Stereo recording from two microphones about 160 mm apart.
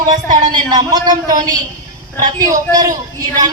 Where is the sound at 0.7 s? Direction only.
25° right (ahead or behind).